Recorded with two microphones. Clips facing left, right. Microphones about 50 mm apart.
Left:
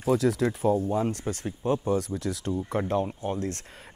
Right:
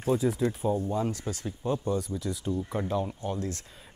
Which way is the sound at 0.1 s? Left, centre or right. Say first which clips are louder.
Left 3 dB; left.